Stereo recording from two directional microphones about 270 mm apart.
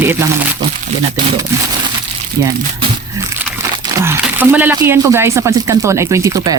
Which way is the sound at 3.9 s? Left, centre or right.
Centre.